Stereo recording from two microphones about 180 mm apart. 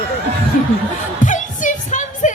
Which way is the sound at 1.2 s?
45° left (ahead or behind).